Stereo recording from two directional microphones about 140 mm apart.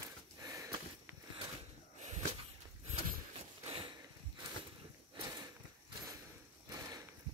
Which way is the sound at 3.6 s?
45° right (ahead or behind).